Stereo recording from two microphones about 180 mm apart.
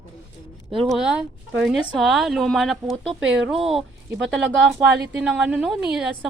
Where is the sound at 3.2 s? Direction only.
90° right.